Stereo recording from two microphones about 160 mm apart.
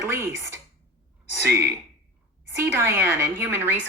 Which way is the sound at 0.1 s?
15° right (ahead or behind).